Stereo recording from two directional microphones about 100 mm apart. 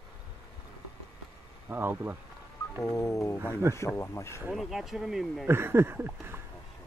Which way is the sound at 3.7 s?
25° left (ahead or behind).